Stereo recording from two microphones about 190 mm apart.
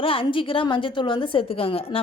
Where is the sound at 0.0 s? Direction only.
30° left (ahead or behind).